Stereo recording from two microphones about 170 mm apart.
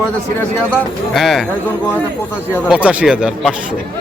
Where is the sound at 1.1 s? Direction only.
Centre (ahead or behind).